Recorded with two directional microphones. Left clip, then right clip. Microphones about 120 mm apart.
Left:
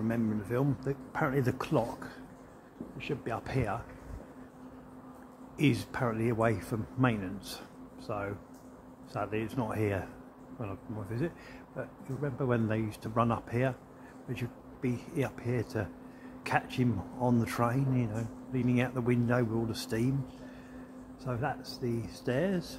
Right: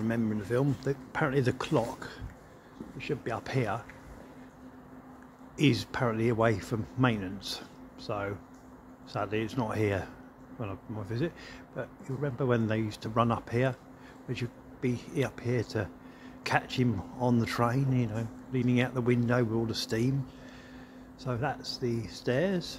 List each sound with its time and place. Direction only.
0.1 s speech: 15° right (ahead or behind)
3.3 s speech: 20° right (ahead or behind)
5.6 s speech: 20° right (ahead or behind)
21.2 s speech: 20° right (ahead or behind)